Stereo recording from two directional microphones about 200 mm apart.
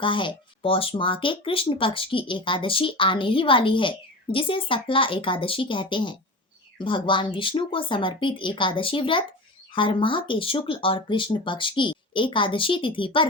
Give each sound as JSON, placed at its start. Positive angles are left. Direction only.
{"t": 0.0, "sound": "speech", "side_deg": 25}